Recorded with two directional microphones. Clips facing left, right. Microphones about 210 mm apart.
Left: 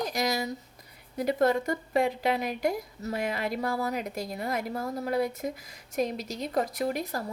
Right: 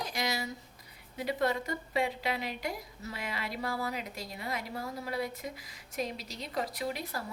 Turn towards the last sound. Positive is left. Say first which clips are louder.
# left 6 dB
turn(degrees=45)  # may be behind; listen again after turning